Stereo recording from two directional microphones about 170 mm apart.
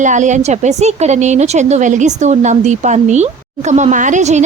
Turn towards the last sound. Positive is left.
turn(degrees=-45)  # may be behind; listen again after turning